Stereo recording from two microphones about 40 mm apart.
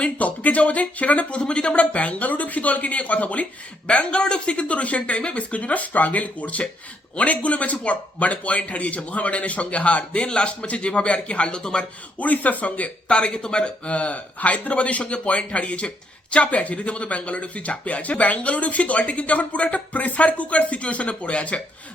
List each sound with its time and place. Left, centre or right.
0.0 s speech: left
1.4 s speech: left
3.8 s speech: left
12.2 s speech: left
13.1 s speech: left